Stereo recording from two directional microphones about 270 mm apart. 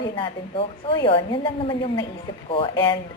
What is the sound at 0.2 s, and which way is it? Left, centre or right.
A woman's voice, centre.